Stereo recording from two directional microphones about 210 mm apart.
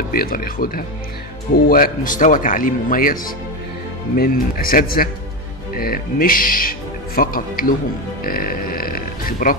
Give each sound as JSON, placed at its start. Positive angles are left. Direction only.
{"t": 0.1, "sound": "speech", "side_deg": 45}